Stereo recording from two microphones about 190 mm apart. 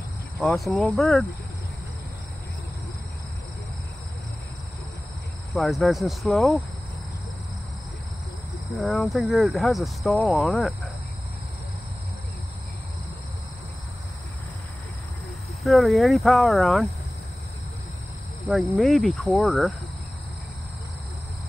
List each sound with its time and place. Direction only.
0.4 s speech: centre (ahead or behind)
5.5 s speech: centre (ahead or behind)
8.7 s speech: centre (ahead or behind)
15.6 s speech: centre (ahead or behind)
18.7 s speech: centre (ahead or behind)